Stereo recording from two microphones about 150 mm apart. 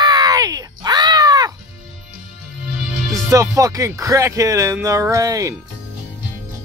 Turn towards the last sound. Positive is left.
turn(degrees=-20)  # may be behind; listen again after turning